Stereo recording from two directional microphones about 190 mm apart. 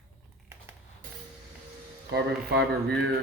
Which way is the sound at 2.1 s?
60° right (ahead or behind).